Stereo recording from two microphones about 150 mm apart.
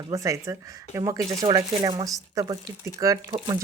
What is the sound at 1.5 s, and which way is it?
Speech, 30° right (ahead or behind).